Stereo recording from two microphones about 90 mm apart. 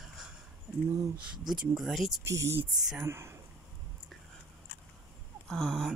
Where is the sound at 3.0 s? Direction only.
30° right (ahead or behind).